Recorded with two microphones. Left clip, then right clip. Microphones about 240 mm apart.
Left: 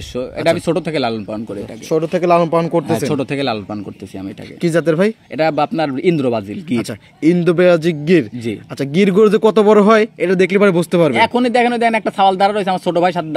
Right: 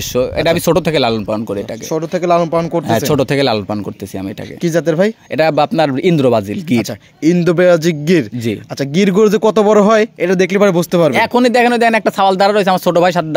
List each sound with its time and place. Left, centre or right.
0.1 s speech: right
1.9 s speech: centre
2.9 s speech: right
4.6 s speech: centre
5.4 s speech: right
6.8 s speech: centre
11.1 s speech: right